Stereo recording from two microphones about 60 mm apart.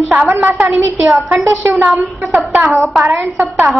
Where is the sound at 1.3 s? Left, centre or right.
Right.